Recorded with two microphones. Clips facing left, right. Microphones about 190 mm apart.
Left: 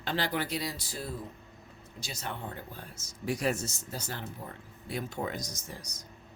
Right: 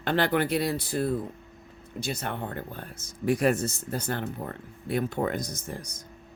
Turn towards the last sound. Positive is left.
turn(degrees=-55)  # may be behind; listen again after turning